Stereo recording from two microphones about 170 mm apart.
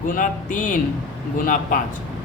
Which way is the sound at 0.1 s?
50° left (ahead or behind).